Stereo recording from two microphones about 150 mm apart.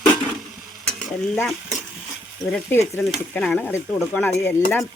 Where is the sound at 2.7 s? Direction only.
15° left (ahead or behind).